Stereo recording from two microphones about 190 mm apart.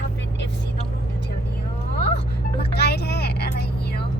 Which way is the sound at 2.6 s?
60° left (ahead or behind).